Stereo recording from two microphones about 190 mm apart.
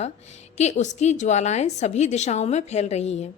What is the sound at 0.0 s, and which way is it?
A woman's voice, 35° left (ahead or behind).